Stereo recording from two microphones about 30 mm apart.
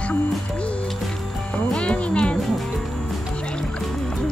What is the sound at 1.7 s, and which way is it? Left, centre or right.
Music, left.